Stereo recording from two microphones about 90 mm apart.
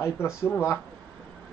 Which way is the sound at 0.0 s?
30° left (ahead or behind).